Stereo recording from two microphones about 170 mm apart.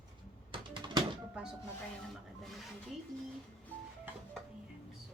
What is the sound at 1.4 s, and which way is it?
Music, 5° right (ahead or behind).